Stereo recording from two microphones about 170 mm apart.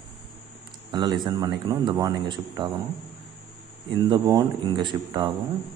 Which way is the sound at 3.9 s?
25° right (ahead or behind).